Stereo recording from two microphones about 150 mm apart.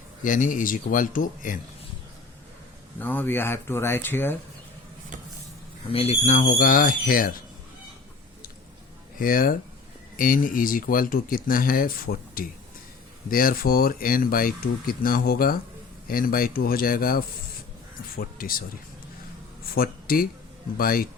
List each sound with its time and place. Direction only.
0.2 s speech: 60° left (ahead or behind)
3.0 s speech: 10° left (ahead or behind)
5.9 s speech: 40° left (ahead or behind); by 7.3 s 70° left (ahead or behind)
9.1 s speech: 70° left (ahead or behind)
18.2 s a sound: 75° left (ahead or behind)
19.7 s speech: 80° left